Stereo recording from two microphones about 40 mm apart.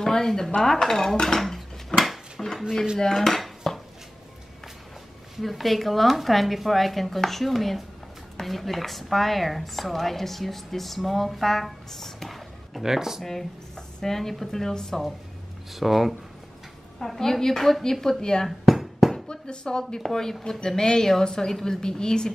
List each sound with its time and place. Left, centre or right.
0.0 s a woman's voice: centre
1.4 s a sound: centre
3.0 s dishes: centre
5.4 s a woman's voice: centre
12.8 s speech: centre
13.2 s a woman's voice: centre
15.7 s a woman's voice: centre
17.0 s a woman's voice: centre
18.2 s speech: centre
18.7 s a sound: centre
19.1 s a sound: left
20.0 s a woman's voice: centre